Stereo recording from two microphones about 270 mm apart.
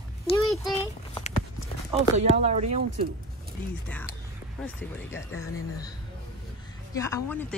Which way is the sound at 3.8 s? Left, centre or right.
Centre.